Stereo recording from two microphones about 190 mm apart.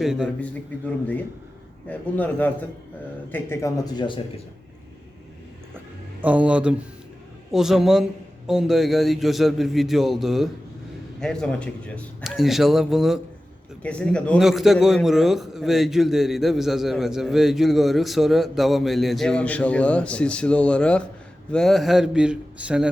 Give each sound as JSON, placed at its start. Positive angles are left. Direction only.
{"t": 0.0, "sound": "a man's voice", "side_deg": 0}
{"t": 1.9, "sound": "a man's voice", "side_deg": 10}
{"t": 6.2, "sound": "a man's voice", "side_deg": -5}